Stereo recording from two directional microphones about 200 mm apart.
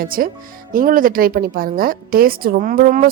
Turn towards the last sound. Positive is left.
turn(degrees=-45)  # may be behind; listen again after turning